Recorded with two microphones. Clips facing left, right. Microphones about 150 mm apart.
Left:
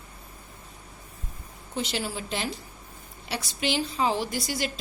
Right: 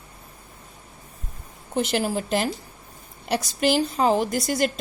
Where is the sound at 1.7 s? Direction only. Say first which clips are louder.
Right 7 dB; 50° right (ahead or behind).